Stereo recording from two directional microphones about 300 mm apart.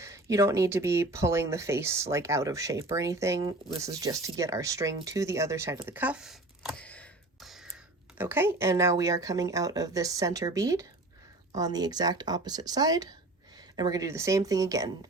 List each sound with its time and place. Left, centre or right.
0.0 s speech: centre